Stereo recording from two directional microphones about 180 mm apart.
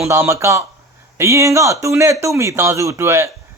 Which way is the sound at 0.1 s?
15° right (ahead or behind).